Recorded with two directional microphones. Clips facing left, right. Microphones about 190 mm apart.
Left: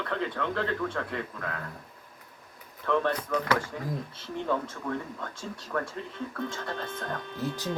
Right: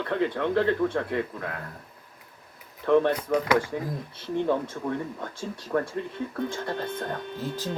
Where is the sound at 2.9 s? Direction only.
20° right (ahead or behind).